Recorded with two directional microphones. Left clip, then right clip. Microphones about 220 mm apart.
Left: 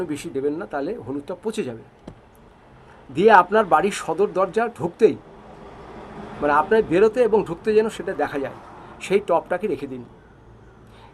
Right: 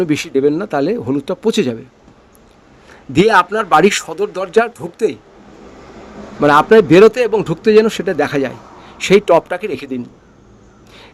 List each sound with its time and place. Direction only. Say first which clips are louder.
0.0 s a man's voice: right 11 dB; 40° right (ahead or behind)
3.1 s a man's voice: right 3 dB; 40° right (ahead or behind)
4.8 s speech: even; centre (ahead or behind)
6.4 s a man's voice: right 9 dB; 45° right (ahead or behind)